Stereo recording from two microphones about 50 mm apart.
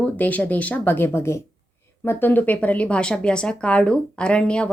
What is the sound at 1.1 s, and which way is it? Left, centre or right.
Speech, left.